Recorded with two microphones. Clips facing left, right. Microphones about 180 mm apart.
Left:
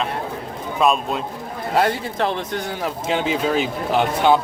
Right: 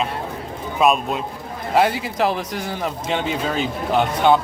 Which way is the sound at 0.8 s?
5° right (ahead or behind).